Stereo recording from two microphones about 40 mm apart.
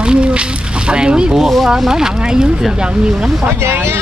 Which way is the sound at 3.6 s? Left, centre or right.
Right.